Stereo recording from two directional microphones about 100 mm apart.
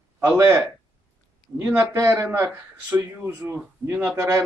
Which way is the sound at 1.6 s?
25° right (ahead or behind).